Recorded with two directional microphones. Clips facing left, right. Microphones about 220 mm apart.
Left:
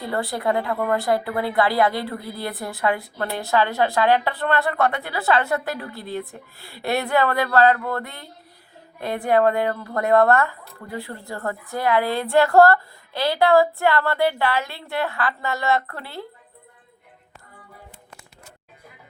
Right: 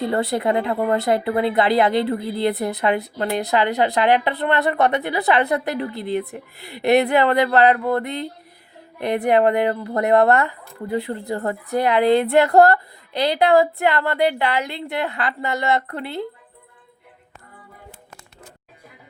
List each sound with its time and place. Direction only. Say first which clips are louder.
0.0 s speech: right 4 dB; 20° right (ahead or behind)